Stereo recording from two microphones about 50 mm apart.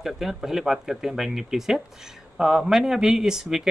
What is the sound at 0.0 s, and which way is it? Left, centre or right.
Speech, centre.